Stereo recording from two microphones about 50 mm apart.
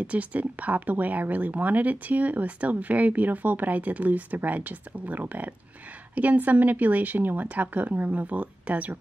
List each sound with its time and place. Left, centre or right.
0.0 s speech: right